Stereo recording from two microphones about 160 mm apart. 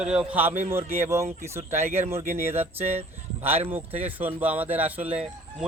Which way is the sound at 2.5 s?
40° right (ahead or behind).